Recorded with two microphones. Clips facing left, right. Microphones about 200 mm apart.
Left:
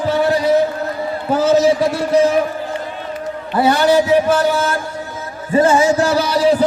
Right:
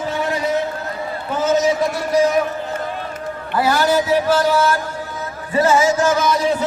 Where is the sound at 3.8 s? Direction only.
60° left (ahead or behind).